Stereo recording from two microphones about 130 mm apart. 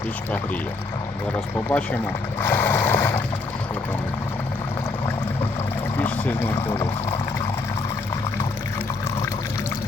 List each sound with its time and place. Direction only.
1.7 s speech: 20° left (ahead or behind)
2.4 s a sound: 15° left (ahead or behind)
6.0 s speech: 15° left (ahead or behind)